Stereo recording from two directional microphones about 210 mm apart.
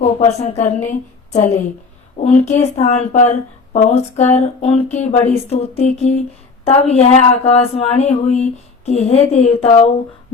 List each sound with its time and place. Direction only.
0.0 s a woman's voice: 30° left (ahead or behind)